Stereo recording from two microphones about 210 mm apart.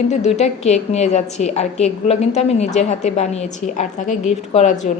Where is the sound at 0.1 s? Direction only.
30° left (ahead or behind).